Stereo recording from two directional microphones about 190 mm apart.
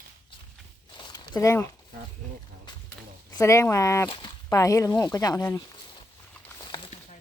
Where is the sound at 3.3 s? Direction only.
15° left (ahead or behind).